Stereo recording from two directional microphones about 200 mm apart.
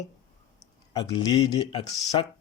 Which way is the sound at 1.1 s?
25° left (ahead or behind).